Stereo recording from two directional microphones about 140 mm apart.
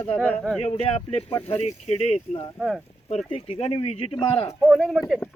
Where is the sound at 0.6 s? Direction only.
45° left (ahead or behind).